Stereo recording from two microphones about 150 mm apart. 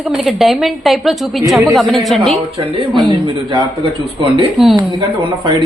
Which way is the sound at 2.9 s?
30° right (ahead or behind).